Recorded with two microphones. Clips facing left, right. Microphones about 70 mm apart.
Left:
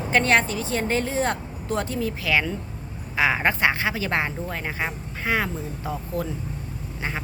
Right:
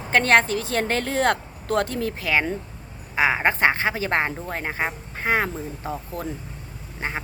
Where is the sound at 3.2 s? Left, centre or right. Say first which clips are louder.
Right 1 dB; right.